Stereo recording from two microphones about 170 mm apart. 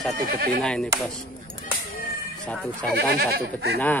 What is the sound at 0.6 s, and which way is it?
Speech, 5° left (ahead or behind).